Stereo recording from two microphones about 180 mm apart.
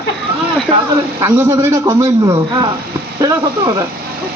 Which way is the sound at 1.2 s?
15° right (ahead or behind).